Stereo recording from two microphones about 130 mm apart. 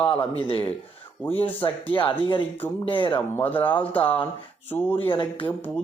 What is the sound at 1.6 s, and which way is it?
Speech, 40° left (ahead or behind).